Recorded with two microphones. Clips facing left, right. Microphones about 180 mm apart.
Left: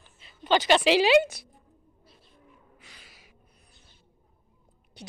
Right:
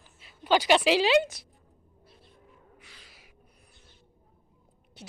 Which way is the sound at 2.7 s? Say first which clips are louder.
Even; 20° left (ahead or behind).